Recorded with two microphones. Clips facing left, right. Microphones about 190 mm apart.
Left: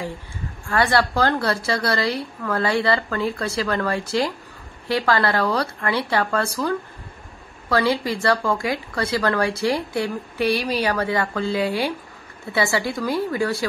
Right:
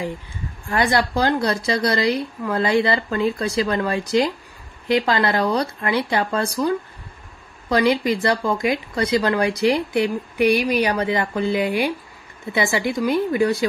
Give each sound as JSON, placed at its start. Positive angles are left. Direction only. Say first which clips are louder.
{"t": 0.7, "sound": "speech", "louder": "even", "side_deg": -15}
{"t": 7.7, "sound": "speech", "louder": "right 3 dB", "side_deg": -20}